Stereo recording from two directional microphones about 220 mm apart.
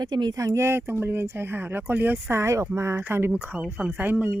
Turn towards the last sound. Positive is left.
turn(degrees=-10)  # may be behind; listen again after turning